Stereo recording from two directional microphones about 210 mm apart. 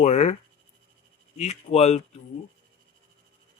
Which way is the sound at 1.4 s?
30° left (ahead or behind).